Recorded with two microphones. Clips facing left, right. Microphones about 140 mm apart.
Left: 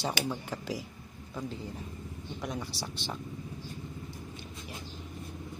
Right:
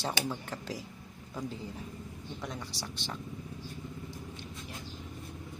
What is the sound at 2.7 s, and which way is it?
Speech, 20° right (ahead or behind).